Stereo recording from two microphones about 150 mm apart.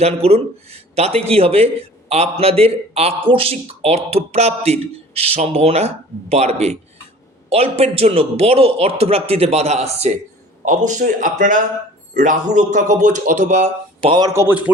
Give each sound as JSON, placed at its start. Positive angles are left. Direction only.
{"t": 0.0, "sound": "speech", "side_deg": -40}
{"t": 10.7, "sound": "speech", "side_deg": -55}
{"t": 14.1, "sound": "speech", "side_deg": -25}